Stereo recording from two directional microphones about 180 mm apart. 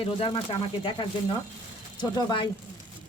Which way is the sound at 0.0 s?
30° left (ahead or behind).